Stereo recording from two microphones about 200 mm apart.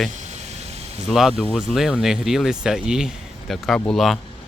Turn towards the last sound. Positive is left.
turn(degrees=0)  # may be behind; listen again after turning